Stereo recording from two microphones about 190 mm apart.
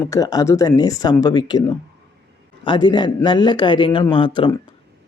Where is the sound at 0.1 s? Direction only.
20° left (ahead or behind).